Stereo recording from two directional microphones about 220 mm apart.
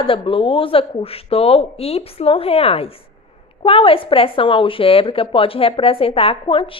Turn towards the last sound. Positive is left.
turn(degrees=25)  # may be behind; listen again after turning